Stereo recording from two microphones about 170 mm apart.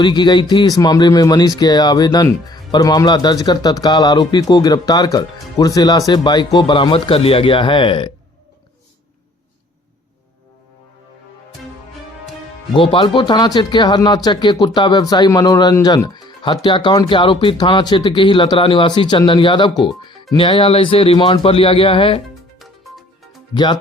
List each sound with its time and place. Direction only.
0.0 s speech: 25° left (ahead or behind)
12.7 s speech: 30° left (ahead or behind)
22.5 s music: centre (ahead or behind)